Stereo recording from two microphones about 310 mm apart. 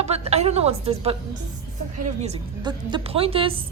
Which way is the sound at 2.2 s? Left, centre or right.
Centre.